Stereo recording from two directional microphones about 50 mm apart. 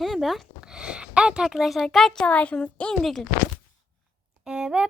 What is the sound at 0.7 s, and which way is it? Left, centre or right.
Speech, centre.